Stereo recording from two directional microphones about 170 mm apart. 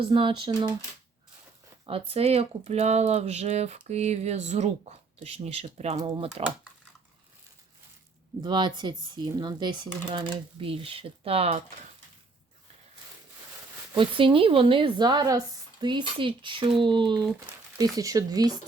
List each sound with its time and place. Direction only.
0.0 s speech: 30° right (ahead or behind)
1.9 s speech: 35° right (ahead or behind)
6.0 s speech: 30° right (ahead or behind)
8.4 s speech: 25° right (ahead or behind)
13.9 s speech: 30° right (ahead or behind)